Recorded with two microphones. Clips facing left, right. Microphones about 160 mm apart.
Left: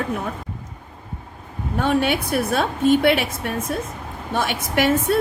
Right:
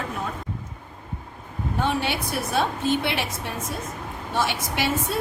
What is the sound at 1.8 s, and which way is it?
Speech, 55° left (ahead or behind).